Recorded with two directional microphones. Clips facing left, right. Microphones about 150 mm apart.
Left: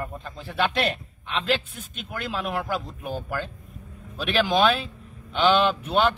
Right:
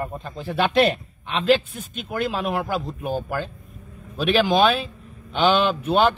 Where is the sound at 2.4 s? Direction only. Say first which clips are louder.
Right 4 dB; 15° right (ahead or behind).